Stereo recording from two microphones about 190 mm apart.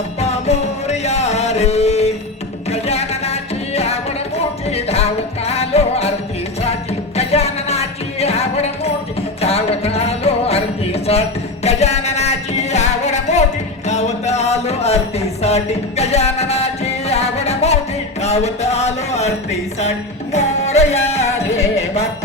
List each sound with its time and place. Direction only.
0.2 s music: 35° left (ahead or behind)
7.2 s music: 35° left (ahead or behind)
13.8 s a sound: 35° left (ahead or behind)
15.4 s music: 35° left (ahead or behind)